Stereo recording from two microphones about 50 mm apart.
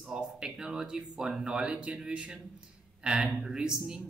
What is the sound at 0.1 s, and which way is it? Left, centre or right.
Speech, centre.